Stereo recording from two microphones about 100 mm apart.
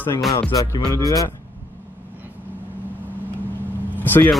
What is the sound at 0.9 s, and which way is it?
Speech, 35° left (ahead or behind).